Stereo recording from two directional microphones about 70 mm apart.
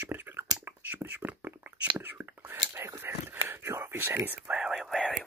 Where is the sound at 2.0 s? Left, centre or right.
Right.